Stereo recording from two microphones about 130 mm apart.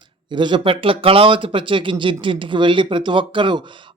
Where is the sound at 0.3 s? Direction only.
40° right (ahead or behind).